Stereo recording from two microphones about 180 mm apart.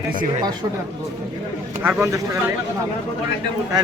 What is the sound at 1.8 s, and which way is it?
Speech, 15° right (ahead or behind).